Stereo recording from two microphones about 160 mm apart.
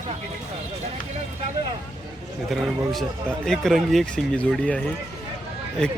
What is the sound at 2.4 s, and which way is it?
Speech, centre (ahead or behind).